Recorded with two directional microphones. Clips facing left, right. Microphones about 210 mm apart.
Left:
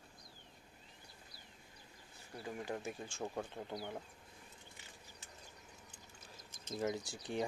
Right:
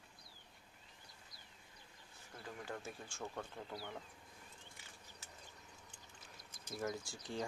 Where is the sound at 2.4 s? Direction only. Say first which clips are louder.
Left 5 dB; 15° left (ahead or behind).